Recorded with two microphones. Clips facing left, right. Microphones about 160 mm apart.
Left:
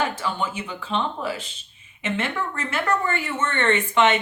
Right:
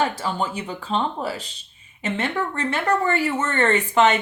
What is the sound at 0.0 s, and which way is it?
Speech, 35° right (ahead or behind).